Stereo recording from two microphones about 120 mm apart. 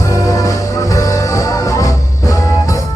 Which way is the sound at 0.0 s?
30° left (ahead or behind).